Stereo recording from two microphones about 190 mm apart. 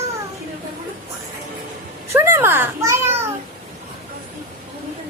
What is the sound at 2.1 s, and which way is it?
A child's voice, 15° right (ahead or behind).